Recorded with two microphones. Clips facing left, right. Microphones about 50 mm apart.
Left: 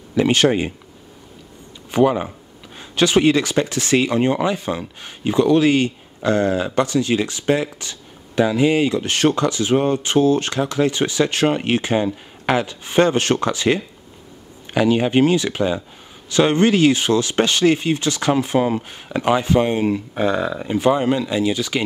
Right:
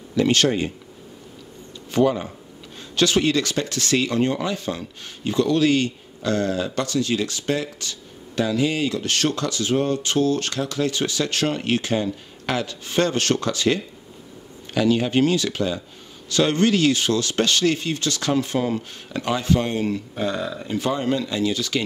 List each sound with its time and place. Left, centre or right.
0.1 s speech: left
1.9 s speech: left